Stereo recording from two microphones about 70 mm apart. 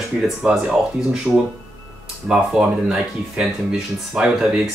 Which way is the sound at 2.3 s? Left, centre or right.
Centre.